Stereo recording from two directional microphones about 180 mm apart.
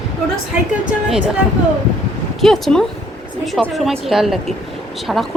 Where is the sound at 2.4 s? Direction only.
Centre (ahead or behind).